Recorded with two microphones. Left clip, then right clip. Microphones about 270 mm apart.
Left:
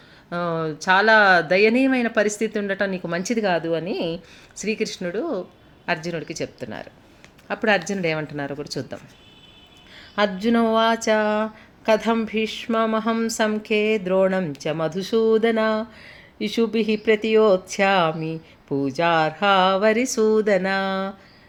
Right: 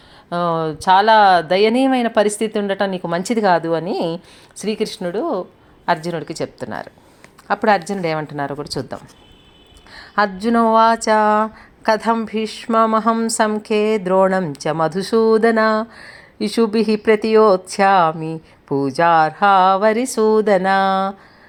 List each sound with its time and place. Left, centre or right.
0.3 s a woman's voice: centre
10.2 s speech: centre